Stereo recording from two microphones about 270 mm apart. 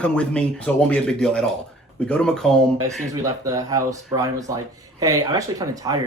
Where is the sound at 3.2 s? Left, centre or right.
Centre.